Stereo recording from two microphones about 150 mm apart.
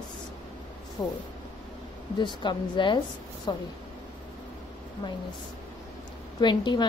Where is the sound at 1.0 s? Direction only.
25° left (ahead or behind).